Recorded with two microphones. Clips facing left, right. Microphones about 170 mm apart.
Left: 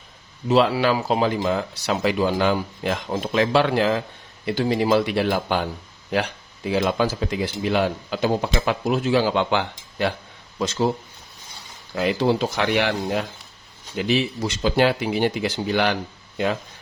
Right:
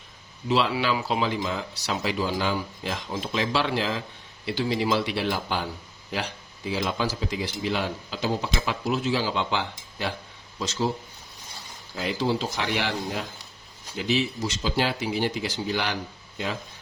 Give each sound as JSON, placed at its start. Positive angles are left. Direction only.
{"t": 0.4, "sound": "speech", "side_deg": 45}
{"t": 6.7, "sound": "speech", "side_deg": 60}
{"t": 11.9, "sound": "speech", "side_deg": 65}